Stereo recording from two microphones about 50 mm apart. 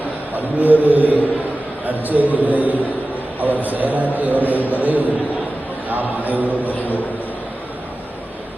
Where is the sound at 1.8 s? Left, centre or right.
Right.